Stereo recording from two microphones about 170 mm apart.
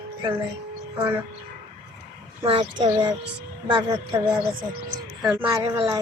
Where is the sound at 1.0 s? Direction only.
10° right (ahead or behind).